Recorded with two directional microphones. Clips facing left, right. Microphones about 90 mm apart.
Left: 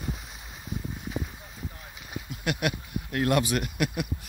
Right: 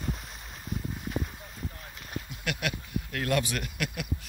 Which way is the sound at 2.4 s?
20° left (ahead or behind).